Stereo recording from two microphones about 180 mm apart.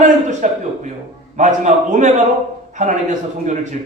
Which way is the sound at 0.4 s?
45° right (ahead or behind).